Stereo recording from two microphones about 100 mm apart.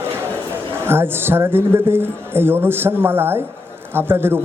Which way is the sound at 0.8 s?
25° right (ahead or behind).